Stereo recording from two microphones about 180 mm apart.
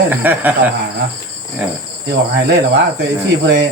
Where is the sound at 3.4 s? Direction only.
75° right (ahead or behind).